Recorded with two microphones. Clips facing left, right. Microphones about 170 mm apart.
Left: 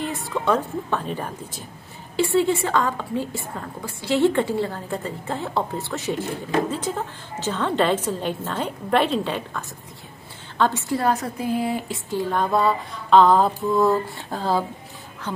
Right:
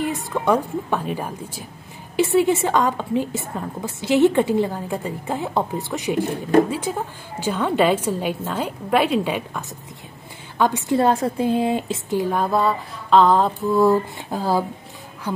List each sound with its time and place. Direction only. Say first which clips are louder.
0.0 s a woman's voice: right 3 dB; 15° right (ahead or behind); by 13.7 s centre (ahead or behind)
13.7 s a woman's voice: right 4 dB; 10° right (ahead or behind)